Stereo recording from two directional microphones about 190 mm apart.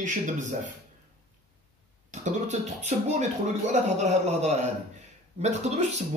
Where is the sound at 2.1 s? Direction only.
40° right (ahead or behind).